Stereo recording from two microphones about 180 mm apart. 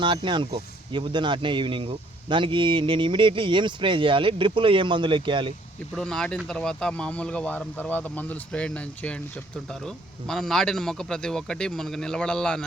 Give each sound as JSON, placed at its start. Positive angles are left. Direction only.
{"t": 0.0, "sound": "speech", "side_deg": -25}
{"t": 6.0, "sound": "a man's voice", "side_deg": 5}